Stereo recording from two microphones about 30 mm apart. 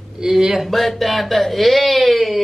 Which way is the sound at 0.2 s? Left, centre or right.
Centre.